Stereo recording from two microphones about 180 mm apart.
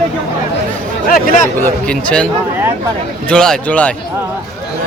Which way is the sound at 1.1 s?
50° left (ahead or behind).